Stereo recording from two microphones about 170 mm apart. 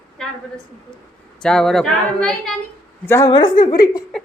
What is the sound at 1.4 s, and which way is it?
Speech, 5° left (ahead or behind).